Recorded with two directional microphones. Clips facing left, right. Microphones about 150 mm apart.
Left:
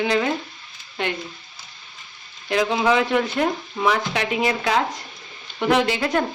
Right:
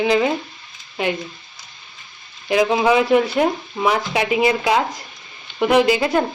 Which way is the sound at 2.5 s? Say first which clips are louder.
Right 4 dB; 10° right (ahead or behind).